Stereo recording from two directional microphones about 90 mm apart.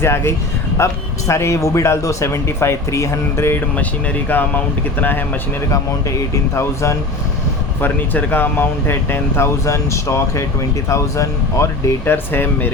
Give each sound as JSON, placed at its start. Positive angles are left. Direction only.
{"t": 0.0, "sound": "speech", "side_deg": 30}
{"t": 3.8, "sound": "speech", "side_deg": 20}
{"t": 5.7, "sound": "speech", "side_deg": 35}
{"t": 7.8, "sound": "speech", "side_deg": 20}